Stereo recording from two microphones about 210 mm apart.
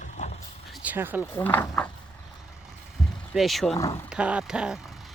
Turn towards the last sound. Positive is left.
turn(degrees=0)  # may be behind; listen again after turning